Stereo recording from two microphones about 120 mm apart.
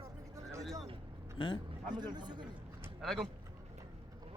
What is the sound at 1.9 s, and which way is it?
Speech, 35° right (ahead or behind).